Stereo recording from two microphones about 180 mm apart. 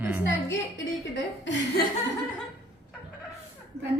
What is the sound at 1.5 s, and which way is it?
Speech, 75° left (ahead or behind).